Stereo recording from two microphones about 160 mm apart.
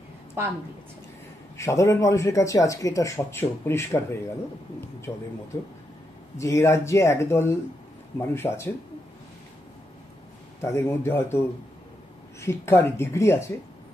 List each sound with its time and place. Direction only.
1.6 s speech: 20° left (ahead or behind)
6.3 s speech: 20° left (ahead or behind)
10.6 s speech: 15° left (ahead or behind)